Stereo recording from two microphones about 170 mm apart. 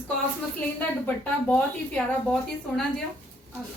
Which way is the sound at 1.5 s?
5° left (ahead or behind).